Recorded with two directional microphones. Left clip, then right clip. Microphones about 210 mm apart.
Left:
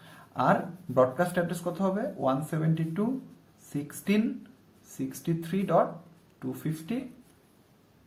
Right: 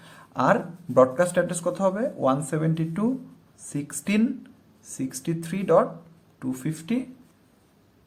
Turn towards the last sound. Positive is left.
turn(degrees=-40)  # may be behind; listen again after turning